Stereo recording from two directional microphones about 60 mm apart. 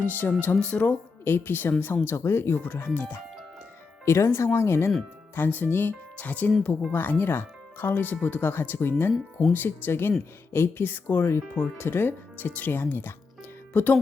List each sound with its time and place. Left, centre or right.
0.0 s speech: left
0.6 s speech: left
1.2 s speech: left
4.0 s speech: left
5.3 s speech: left